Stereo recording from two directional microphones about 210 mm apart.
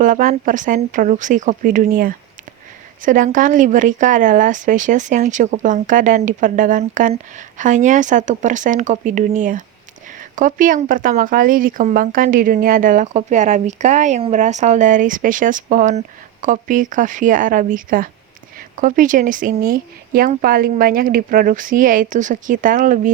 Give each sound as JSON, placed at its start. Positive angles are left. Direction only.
{"t": 0.0, "sound": "speech", "side_deg": -40}